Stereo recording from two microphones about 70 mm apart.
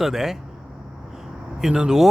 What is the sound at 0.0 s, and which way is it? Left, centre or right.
Speech, centre.